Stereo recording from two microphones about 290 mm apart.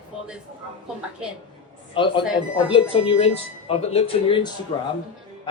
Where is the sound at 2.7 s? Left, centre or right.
Centre.